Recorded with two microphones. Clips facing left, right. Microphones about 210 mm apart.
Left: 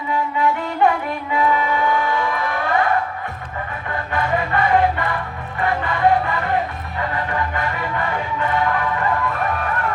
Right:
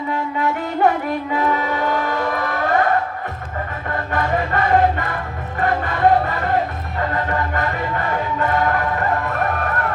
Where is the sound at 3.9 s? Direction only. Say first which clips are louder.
Right 1 dB; 45° right (ahead or behind).